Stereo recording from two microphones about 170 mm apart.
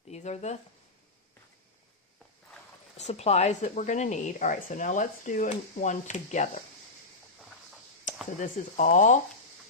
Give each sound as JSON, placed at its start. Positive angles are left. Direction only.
{"t": 0.1, "sound": "speech", "side_deg": 40}
{"t": 3.0, "sound": "speech", "side_deg": 40}
{"t": 8.4, "sound": "speech", "side_deg": 45}